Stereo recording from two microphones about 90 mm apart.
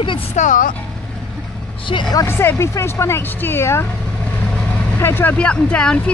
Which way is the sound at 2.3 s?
30° left (ahead or behind).